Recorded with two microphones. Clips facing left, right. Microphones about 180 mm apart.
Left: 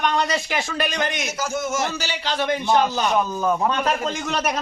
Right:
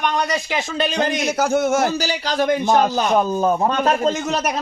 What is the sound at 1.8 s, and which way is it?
A man's voice, 40° right (ahead or behind).